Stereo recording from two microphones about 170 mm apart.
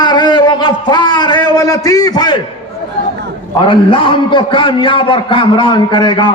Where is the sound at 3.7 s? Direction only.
30° left (ahead or behind).